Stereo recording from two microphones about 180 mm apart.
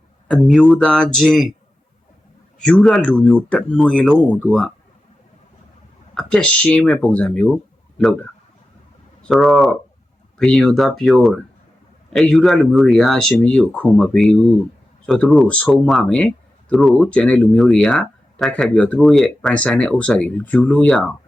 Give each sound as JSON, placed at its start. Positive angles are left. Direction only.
{"t": 0.4, "sound": "speech", "side_deg": 0}
{"t": 2.6, "sound": "speech", "side_deg": 0}
{"t": 6.1, "sound": "speech", "side_deg": 5}